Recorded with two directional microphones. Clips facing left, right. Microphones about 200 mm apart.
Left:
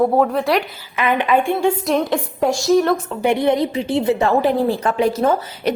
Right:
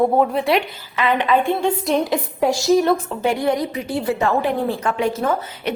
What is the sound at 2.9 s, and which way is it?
A woman's voice, 20° left (ahead or behind).